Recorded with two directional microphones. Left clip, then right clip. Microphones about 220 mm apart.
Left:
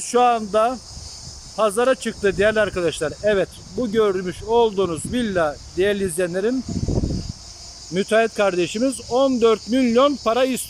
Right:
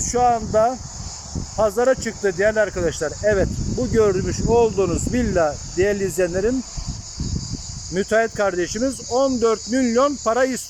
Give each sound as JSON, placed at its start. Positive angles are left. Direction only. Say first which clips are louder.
{"t": 0.1, "sound": "speech", "louder": "left 1 dB", "side_deg": 5}
{"t": 7.9, "sound": "speech", "louder": "left 1 dB", "side_deg": 5}